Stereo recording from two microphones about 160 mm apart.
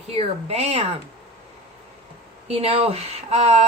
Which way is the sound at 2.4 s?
40° right (ahead or behind).